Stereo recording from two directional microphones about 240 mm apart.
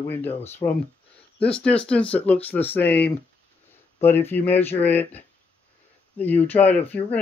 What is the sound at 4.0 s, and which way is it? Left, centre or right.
A man's voice, centre.